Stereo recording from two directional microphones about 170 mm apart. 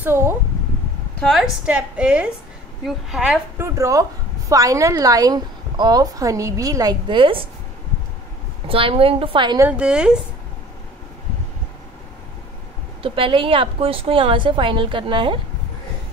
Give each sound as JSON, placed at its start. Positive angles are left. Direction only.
{"t": 0.0, "sound": "a woman's voice", "side_deg": -15}
{"t": 1.7, "sound": "a woman's voice", "side_deg": -5}
{"t": 3.6, "sound": "a woman's voice", "side_deg": -20}
{"t": 8.6, "sound": "a woman's voice", "side_deg": -30}
{"t": 9.6, "sound": "a woman's voice", "side_deg": -5}
{"t": 13.0, "sound": "a woman's voice", "side_deg": -30}